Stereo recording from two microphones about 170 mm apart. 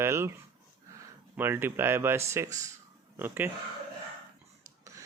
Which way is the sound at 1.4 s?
10° right (ahead or behind).